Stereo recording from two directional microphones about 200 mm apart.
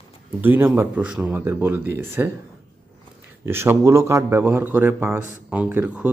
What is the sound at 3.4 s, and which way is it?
A man's voice, 10° right (ahead or behind).